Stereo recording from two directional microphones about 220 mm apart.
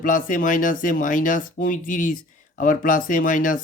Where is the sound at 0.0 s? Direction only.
35° left (ahead or behind).